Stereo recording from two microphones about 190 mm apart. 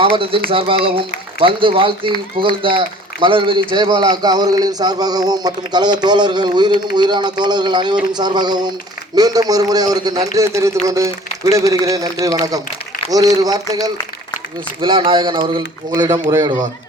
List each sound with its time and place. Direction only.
0.0 s a man's voice: 30° right (ahead or behind)